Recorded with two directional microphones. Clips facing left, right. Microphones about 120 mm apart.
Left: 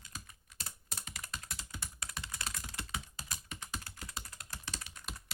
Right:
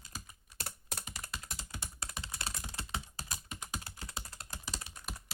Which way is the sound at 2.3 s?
30° right (ahead or behind).